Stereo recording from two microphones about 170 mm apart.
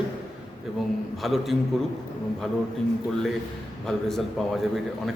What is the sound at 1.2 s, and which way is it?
Speech, centre (ahead or behind).